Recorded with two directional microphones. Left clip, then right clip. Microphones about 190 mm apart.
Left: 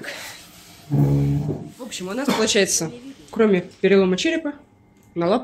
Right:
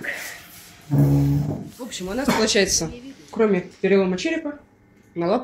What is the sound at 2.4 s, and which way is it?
Speech, 5° left (ahead or behind).